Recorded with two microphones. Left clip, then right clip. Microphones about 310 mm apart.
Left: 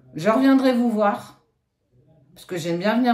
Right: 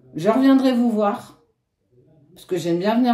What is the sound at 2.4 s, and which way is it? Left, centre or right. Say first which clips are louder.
Speech: right 2 dB; left.